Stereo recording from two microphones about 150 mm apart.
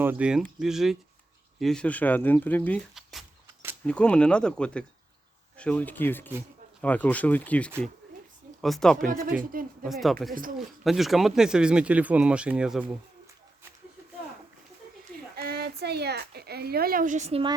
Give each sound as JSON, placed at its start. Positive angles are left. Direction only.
{"t": 0.0, "sound": "speech", "side_deg": -10}
{"t": 2.9, "sound": "a sound", "side_deg": 0}
{"t": 3.4, "sound": "a sound", "side_deg": -15}
{"t": 3.8, "sound": "speech", "side_deg": 10}
{"t": 9.4, "sound": "speech", "side_deg": -65}
{"t": 9.8, "sound": "speech", "side_deg": 0}
{"t": 15.4, "sound": "a woman's voice", "side_deg": -90}